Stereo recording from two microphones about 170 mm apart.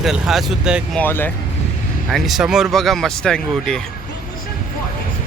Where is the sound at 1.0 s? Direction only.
10° left (ahead or behind).